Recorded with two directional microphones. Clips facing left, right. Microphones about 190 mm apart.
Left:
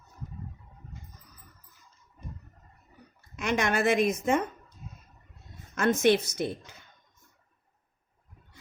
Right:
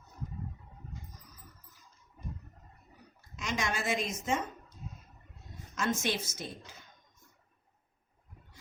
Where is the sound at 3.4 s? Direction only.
60° left (ahead or behind).